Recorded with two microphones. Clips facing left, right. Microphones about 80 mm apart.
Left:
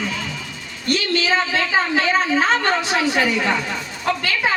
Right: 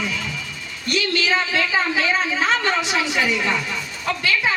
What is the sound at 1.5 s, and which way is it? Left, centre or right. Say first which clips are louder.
A man's voice: left 2 dB; left.